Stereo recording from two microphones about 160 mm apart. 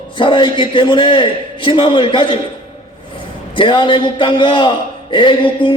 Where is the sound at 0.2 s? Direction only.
30° left (ahead or behind).